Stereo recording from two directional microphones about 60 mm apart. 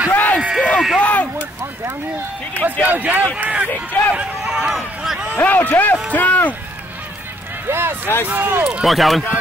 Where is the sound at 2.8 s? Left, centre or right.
Right.